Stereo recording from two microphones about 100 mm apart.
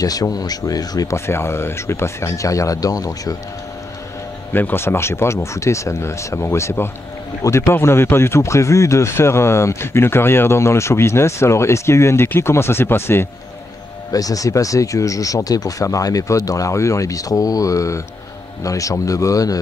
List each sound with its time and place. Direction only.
0.0 s speech: 40° left (ahead or behind)
4.5 s speech: 20° left (ahead or behind)
14.1 s speech: 35° left (ahead or behind)